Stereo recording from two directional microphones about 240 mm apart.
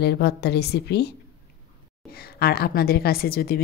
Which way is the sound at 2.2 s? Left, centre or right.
Left.